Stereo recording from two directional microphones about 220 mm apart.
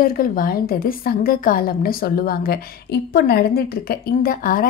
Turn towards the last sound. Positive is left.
turn(degrees=40)  # may be behind; listen again after turning